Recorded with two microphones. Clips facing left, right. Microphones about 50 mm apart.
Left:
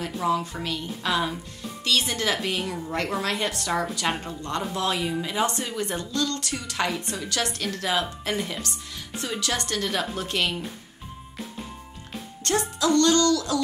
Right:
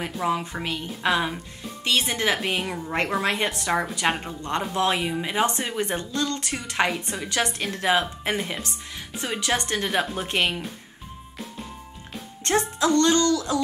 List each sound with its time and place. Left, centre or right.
0.0 s a woman's voice: right
12.4 s a woman's voice: right